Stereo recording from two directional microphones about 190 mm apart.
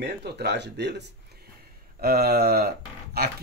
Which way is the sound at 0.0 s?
60° right (ahead or behind).